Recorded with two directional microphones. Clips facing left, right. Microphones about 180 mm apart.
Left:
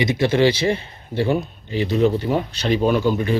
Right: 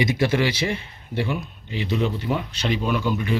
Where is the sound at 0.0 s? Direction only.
25° left (ahead or behind).